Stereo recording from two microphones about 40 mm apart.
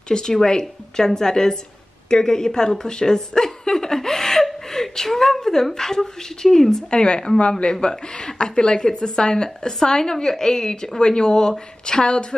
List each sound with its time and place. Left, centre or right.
0.1 s a woman's voice: centre
2.0 s a sound: centre
4.6 s a woman's voice: centre
6.9 s speech: left